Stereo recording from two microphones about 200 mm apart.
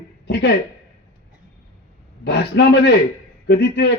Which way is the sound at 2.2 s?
55° left (ahead or behind).